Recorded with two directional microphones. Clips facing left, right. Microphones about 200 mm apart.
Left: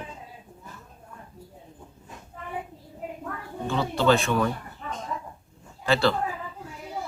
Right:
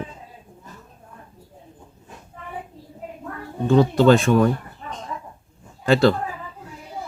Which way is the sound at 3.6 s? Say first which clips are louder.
Right 8 dB; 45° right (ahead or behind).